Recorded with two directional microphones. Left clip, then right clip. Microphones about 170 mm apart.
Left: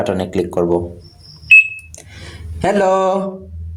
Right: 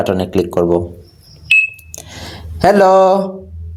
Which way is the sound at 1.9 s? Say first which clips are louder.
Right 6 dB; 35° right (ahead or behind).